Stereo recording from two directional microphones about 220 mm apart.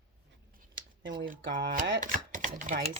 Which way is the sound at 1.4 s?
55° right (ahead or behind).